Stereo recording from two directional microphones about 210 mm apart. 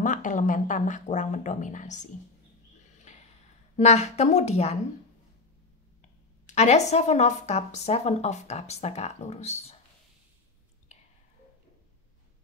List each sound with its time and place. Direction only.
0.0 s speech: 35° left (ahead or behind)
3.7 s speech: 30° left (ahead or behind)
6.4 s speech: 30° left (ahead or behind)